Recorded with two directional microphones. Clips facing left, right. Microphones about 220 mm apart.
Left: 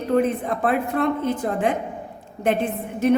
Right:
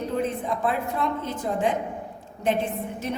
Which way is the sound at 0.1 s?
60° left (ahead or behind).